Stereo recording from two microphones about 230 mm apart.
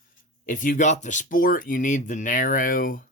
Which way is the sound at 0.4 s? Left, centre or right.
Left.